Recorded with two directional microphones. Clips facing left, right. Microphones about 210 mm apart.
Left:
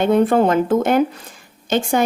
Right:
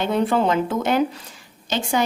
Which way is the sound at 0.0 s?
50° left (ahead or behind).